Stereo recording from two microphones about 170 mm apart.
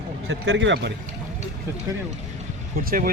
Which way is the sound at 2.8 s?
55° right (ahead or behind).